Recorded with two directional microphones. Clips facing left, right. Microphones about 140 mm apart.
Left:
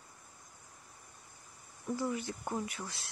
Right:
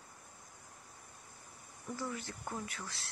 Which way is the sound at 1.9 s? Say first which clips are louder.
Left 6 dB; 15° left (ahead or behind).